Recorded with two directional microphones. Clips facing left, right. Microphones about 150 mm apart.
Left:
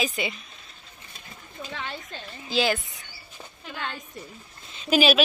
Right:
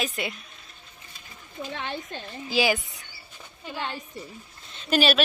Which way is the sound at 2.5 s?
10° right (ahead or behind).